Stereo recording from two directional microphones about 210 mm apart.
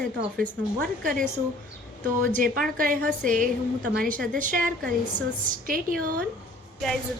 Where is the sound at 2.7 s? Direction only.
40° right (ahead or behind).